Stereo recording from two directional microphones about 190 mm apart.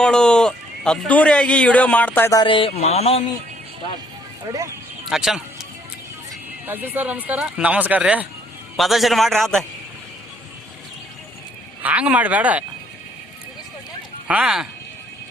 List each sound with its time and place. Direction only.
0.0 s speech: 5° left (ahead or behind)
2.4 s a sound: 25° left (ahead or behind)
5.0 s speech: centre (ahead or behind)
6.7 s a man's voice: 10° right (ahead or behind)
11.8 s speech: 10° right (ahead or behind)
14.3 s a man's voice: 5° right (ahead or behind)